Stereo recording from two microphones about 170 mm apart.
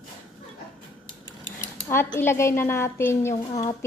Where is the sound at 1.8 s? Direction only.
15° left (ahead or behind).